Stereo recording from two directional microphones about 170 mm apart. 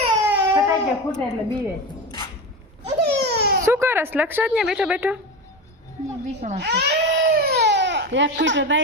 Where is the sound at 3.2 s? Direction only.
75° right (ahead or behind).